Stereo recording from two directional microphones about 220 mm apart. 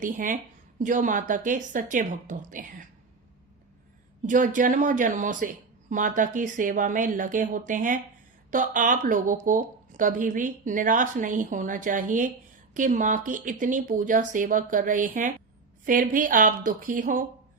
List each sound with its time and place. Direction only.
0.0 s speech: 35° right (ahead or behind)
4.3 s speech: 35° right (ahead or behind)